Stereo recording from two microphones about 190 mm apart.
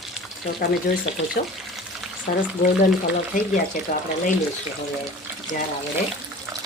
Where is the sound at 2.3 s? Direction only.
45° left (ahead or behind).